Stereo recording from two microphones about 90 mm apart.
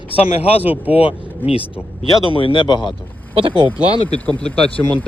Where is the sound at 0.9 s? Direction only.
90° left.